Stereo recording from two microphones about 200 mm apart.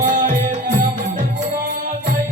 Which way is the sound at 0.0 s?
40° right (ahead or behind).